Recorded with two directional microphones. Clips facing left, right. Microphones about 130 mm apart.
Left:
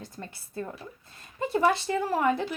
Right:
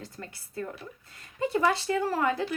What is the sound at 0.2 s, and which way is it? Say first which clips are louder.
A woman's voice: left 1 dB; 25° left (ahead or behind).